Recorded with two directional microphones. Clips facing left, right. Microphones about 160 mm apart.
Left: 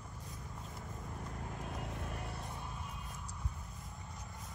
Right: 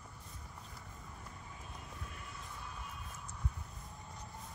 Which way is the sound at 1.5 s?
65° left (ahead or behind).